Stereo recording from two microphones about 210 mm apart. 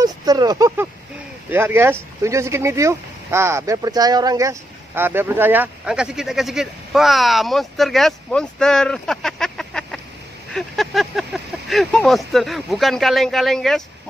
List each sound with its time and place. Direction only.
0.0 s speech: 20° right (ahead or behind); by 13.8 s centre (ahead or behind)